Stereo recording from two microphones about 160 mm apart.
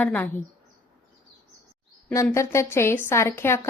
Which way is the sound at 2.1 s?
20° left (ahead or behind).